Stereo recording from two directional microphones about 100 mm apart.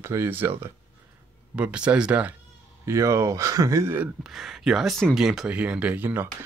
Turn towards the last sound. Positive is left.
turn(degrees=-20)  # may be behind; listen again after turning